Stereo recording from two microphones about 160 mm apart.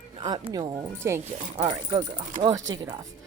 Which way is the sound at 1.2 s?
45° right (ahead or behind).